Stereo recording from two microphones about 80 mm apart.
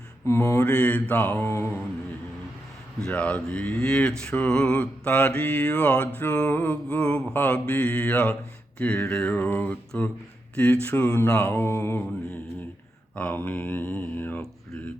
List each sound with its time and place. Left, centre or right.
0.3 s mantra: left
0.6 s mantra: centre; by 1.8 s left
3.1 s mantra: centre
10.5 s speech: centre
10.8 s mantra: left
13.1 s mantra: left